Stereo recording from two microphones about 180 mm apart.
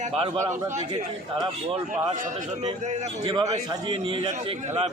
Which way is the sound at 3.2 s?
25° right (ahead or behind).